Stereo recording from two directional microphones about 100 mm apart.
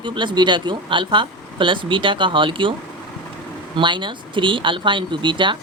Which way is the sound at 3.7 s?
55° right (ahead or behind).